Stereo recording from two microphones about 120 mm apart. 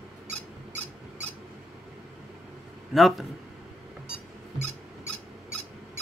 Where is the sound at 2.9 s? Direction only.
Centre (ahead or behind).